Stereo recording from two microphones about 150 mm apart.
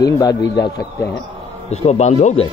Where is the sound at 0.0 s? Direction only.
25° left (ahead or behind).